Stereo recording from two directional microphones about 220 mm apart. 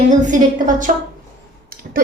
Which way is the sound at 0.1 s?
35° right (ahead or behind).